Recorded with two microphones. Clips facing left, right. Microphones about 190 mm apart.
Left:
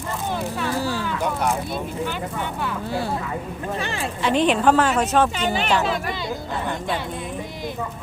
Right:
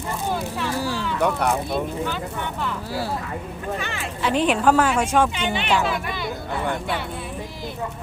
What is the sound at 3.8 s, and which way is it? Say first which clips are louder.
Speech: left 3 dB; 35° left (ahead or behind).